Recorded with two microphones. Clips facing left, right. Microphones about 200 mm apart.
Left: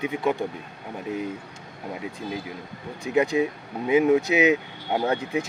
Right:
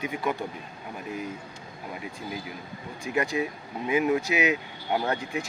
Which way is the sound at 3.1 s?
20° left (ahead or behind).